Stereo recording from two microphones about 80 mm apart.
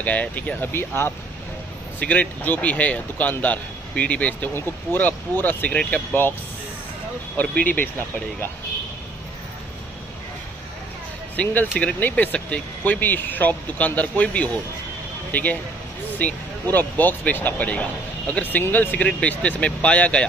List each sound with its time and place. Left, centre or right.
0.0 s speech: centre
7.3 s speech: left
11.4 s speech: centre
16.7 s speech: left